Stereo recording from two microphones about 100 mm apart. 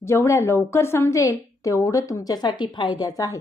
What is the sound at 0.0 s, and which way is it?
A woman's voice, 30° left (ahead or behind).